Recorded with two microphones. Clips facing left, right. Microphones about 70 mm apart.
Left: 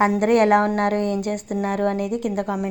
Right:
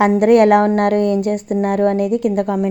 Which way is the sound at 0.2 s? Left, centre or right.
Right.